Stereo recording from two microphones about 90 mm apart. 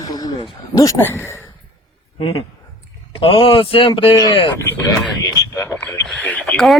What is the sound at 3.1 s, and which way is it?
Speech, 90° left.